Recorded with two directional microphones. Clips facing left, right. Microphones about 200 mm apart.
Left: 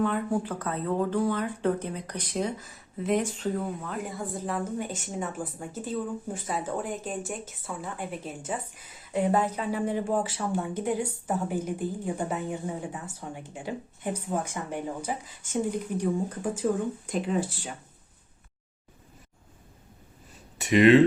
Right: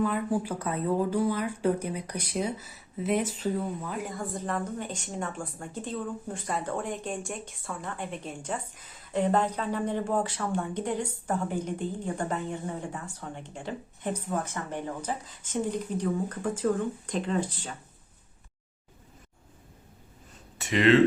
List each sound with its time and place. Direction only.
0.0 s speech: 5° right (ahead or behind)
20.6 s speech: 15° left (ahead or behind)